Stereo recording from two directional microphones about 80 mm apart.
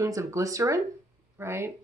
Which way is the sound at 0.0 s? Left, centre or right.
Right.